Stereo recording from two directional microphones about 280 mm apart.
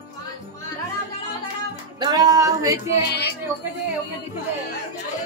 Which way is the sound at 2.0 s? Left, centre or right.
Centre.